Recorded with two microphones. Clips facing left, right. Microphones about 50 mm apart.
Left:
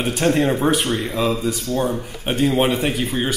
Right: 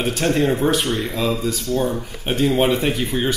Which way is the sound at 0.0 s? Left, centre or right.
Centre.